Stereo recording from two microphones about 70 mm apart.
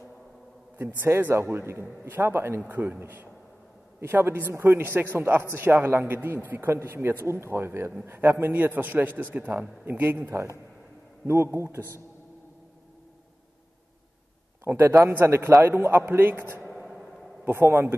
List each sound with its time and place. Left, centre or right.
0.7 s a man's voice: right
11.2 s a man's voice: right
14.6 s a man's voice: right
16.7 s a sound: centre
17.5 s a man's voice: right